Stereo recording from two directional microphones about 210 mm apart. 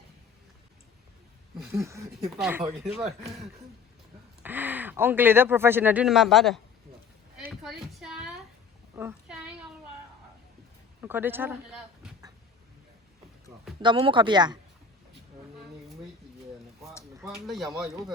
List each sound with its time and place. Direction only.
1.7 s speech: 15° right (ahead or behind)
4.4 s speech: 10° right (ahead or behind)
7.3 s a sound: centre (ahead or behind)
9.0 s a sound: 10° right (ahead or behind)
11.0 s speech: 10° right (ahead or behind)
13.8 s speech: 25° right (ahead or behind)
17.4 s speech: centre (ahead or behind)